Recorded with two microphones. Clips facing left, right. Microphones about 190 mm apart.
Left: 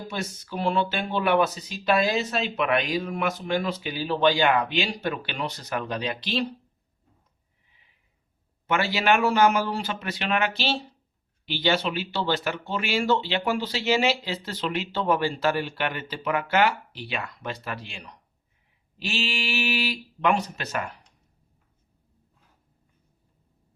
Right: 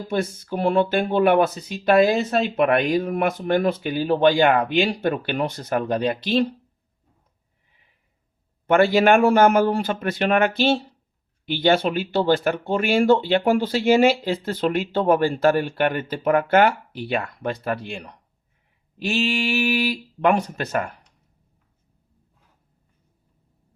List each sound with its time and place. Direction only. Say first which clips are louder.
0.1 s speech: right 11 dB; 50° right (ahead or behind)
8.6 s speech: right 8 dB; 50° right (ahead or behind)